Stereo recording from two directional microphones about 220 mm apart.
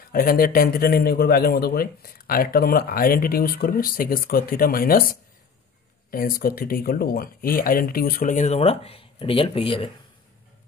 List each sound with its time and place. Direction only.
0.1 s a man's voice: 40° left (ahead or behind); by 9.8 s 25° left (ahead or behind)